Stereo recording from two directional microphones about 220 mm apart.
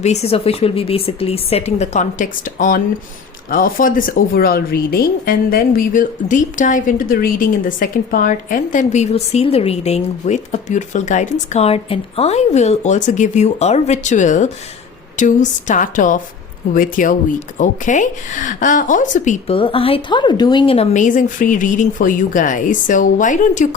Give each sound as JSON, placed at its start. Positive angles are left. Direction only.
{"t": 0.0, "sound": "a woman's voice", "side_deg": 30}